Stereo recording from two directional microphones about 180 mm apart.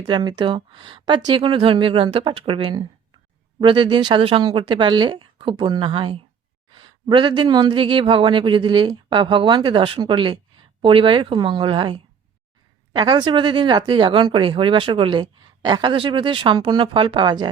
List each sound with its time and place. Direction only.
0.1 s speech: 25° right (ahead or behind)